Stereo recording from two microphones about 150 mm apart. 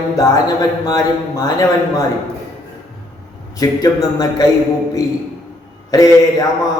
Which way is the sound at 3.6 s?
25° left (ahead or behind).